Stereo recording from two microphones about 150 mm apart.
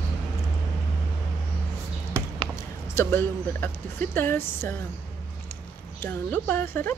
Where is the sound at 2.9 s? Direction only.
15° left (ahead or behind).